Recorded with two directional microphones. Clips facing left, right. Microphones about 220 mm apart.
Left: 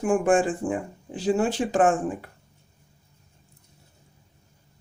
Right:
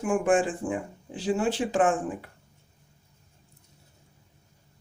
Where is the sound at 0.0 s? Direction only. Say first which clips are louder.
Left 3 dB; 45° left (ahead or behind).